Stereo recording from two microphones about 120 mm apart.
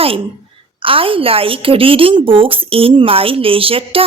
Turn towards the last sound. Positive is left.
turn(degrees=-50)  # may be behind; listen again after turning